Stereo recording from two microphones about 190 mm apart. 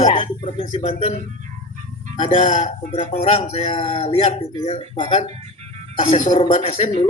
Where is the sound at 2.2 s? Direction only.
40° left (ahead or behind).